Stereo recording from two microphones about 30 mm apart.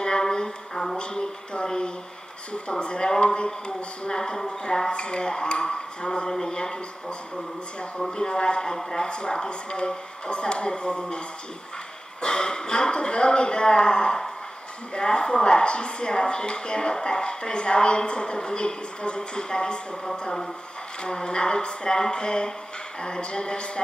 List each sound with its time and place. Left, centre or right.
0.0 s a sound: left
0.9 s a sound: left
2.7 s a woman's voice: left
4.2 s a woman's voice: centre
6.2 s a woman's voice: centre
21.0 s a woman's voice: left